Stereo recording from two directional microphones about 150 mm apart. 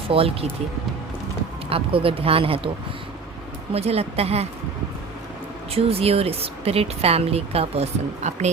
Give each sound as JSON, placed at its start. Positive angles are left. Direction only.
{"t": 0.1, "sound": "speech", "side_deg": -40}
{"t": 1.7, "sound": "speech", "side_deg": -40}
{"t": 3.7, "sound": "a woman's voice", "side_deg": -45}
{"t": 5.7, "sound": "speech", "side_deg": -40}